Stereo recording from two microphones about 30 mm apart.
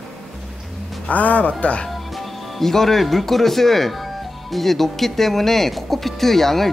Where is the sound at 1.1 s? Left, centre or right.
Left.